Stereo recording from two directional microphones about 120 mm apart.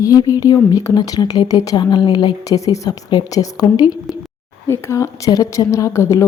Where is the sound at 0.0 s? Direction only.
30° left (ahead or behind).